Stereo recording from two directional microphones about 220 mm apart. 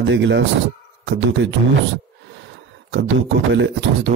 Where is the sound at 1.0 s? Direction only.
55° right (ahead or behind).